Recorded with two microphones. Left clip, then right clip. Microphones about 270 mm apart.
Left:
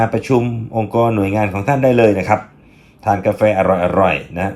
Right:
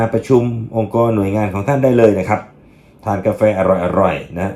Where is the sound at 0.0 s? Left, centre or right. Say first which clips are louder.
Right 1 dB; left.